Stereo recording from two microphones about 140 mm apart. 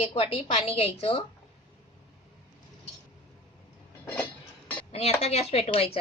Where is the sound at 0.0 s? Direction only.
45° left (ahead or behind).